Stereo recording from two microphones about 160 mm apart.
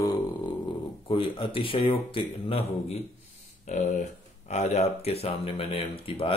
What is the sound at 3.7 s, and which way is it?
Speech, 45° left (ahead or behind).